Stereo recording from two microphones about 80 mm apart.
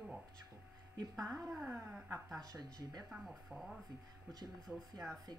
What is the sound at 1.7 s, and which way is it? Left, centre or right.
Speech, right.